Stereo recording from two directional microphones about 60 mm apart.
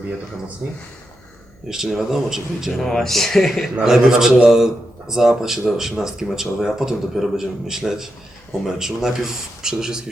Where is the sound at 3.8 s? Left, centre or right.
Centre.